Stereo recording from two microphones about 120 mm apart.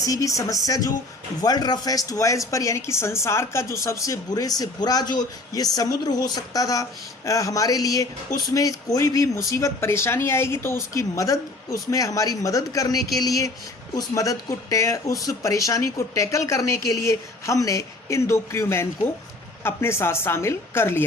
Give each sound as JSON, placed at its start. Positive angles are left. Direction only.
{"t": 0.0, "sound": "speech", "side_deg": 30}